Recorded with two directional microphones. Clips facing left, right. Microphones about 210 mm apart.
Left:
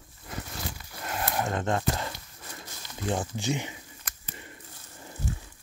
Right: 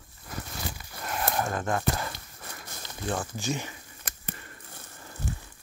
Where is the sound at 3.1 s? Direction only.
20° left (ahead or behind).